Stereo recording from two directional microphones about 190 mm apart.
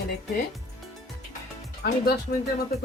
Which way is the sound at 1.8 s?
60° left (ahead or behind).